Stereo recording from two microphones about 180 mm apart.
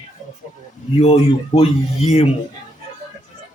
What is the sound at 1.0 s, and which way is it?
Speech, 35° left (ahead or behind).